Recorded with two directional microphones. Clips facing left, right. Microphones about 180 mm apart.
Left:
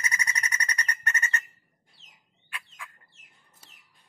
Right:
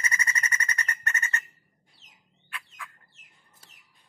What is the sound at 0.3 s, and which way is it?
Alarm clock, 15° left (ahead or behind).